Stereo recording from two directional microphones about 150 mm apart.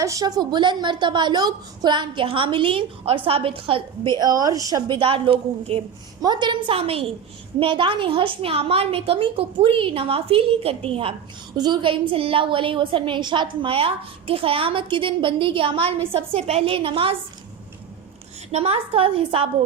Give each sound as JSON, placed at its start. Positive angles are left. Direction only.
{"t": 0.0, "sound": "a woman's voice", "side_deg": -20}
{"t": 4.9, "sound": "a woman's voice", "side_deg": -35}
{"t": 6.2, "sound": "a woman's voice", "side_deg": -30}
{"t": 18.5, "sound": "a woman's voice", "side_deg": -40}